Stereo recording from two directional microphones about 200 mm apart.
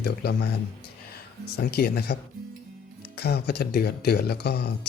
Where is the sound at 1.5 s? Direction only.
55° left (ahead or behind).